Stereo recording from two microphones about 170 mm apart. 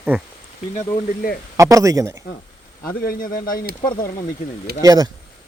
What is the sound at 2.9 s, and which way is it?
Speech, 60° left (ahead or behind).